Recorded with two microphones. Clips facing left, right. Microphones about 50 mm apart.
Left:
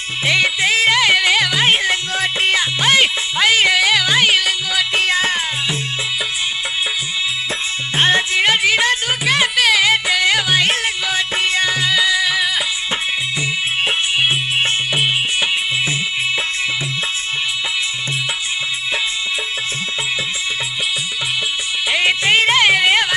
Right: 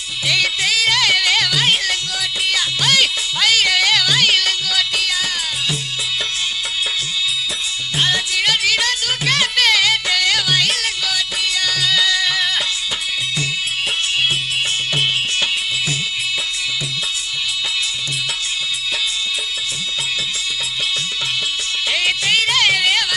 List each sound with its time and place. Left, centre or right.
0.2 s music: left
4.9 s music: left
7.9 s music: left; by 12.6 s centre
21.9 s music: left